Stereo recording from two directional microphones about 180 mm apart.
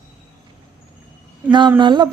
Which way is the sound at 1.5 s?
25° right (ahead or behind).